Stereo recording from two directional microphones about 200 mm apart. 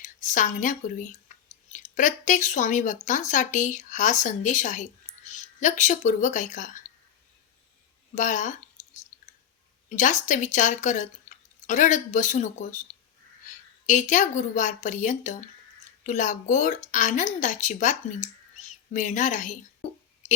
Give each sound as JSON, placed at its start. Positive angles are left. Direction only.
{"t": 0.0, "sound": "speech", "side_deg": 40}
{"t": 8.1, "sound": "a sound", "side_deg": 40}
{"t": 9.9, "sound": "a woman's voice", "side_deg": 40}